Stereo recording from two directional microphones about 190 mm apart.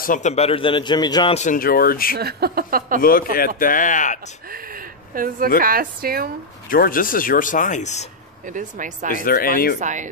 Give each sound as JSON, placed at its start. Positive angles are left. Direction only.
{"t": 0.0, "sound": "a man's voice", "side_deg": 40}
{"t": 1.3, "sound": "speech", "side_deg": 40}
{"t": 2.1, "sound": "speech", "side_deg": -55}
{"t": 3.0, "sound": "speech", "side_deg": 50}
{"t": 4.5, "sound": "a sound", "side_deg": -50}
{"t": 5.6, "sound": "speech", "side_deg": -50}
{"t": 6.7, "sound": "speech", "side_deg": 50}
{"t": 8.5, "sound": "speech", "side_deg": -45}
{"t": 9.1, "sound": "speech", "side_deg": 50}
{"t": 9.8, "sound": "speech", "side_deg": -40}